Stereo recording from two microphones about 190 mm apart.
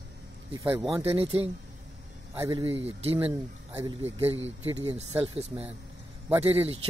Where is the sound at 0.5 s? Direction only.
10° right (ahead or behind).